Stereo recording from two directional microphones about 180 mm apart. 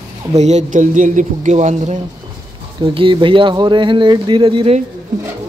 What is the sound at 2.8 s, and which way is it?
Speech, 30° right (ahead or behind).